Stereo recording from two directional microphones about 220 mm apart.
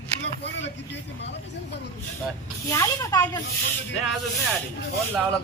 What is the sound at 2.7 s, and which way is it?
Speech, 15° left (ahead or behind).